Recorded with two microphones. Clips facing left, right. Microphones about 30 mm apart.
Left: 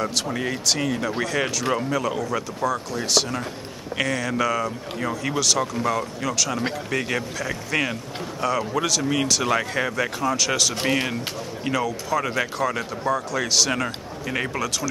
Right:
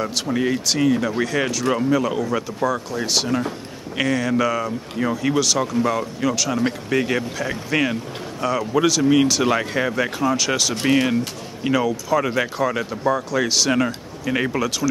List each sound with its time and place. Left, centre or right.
0.0 s speech: centre